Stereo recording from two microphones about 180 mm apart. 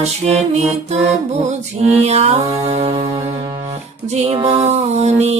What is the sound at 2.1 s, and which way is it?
Mantra, 35° right (ahead or behind).